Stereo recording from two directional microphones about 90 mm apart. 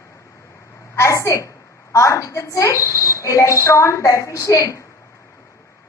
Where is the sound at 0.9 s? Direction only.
35° left (ahead or behind).